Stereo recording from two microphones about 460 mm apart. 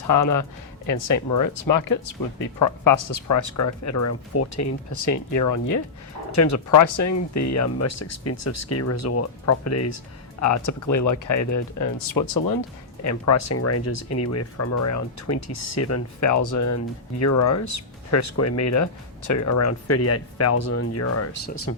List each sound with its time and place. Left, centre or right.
0.1 s speech: left
13.1 s speech: left